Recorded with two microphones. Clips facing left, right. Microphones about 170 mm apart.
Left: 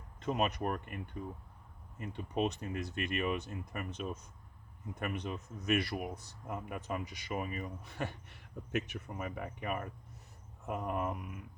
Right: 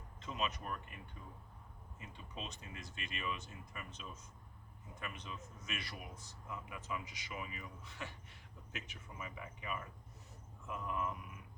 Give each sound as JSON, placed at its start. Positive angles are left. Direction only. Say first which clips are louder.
{"t": 0.2, "sound": "speech", "louder": "left 8 dB", "side_deg": 60}